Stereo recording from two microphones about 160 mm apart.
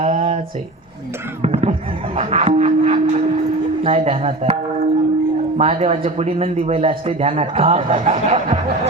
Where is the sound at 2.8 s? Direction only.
45° right (ahead or behind).